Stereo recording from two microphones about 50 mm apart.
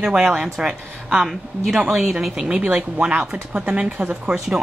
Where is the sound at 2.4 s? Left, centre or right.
Centre.